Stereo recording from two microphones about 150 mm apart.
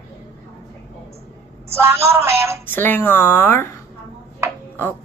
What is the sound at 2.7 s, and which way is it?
A woman's voice, 15° left (ahead or behind).